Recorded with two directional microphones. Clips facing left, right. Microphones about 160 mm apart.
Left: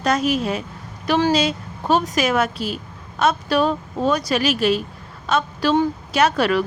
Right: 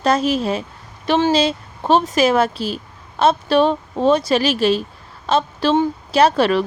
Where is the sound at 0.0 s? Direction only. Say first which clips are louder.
Right 2 dB; 30° right (ahead or behind).